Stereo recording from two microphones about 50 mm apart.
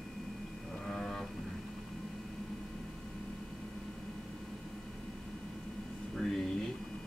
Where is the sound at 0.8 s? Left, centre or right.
Centre.